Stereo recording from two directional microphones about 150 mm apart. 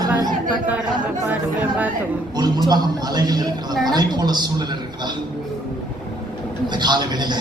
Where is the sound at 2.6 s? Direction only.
30° right (ahead or behind).